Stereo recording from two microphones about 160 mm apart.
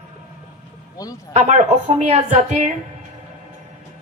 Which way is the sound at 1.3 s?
45° right (ahead or behind).